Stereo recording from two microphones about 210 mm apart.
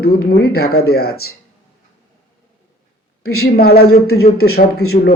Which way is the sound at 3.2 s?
90° left.